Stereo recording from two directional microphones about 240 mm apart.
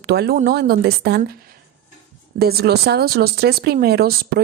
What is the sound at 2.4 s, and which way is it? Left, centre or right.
A woman's voice, right.